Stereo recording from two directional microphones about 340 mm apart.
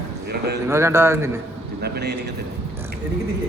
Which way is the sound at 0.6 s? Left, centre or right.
Centre.